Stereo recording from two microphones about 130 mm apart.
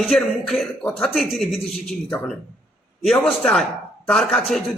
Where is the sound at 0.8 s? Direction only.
15° left (ahead or behind).